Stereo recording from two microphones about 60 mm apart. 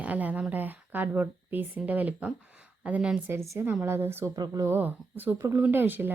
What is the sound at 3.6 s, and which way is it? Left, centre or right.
Speech, right.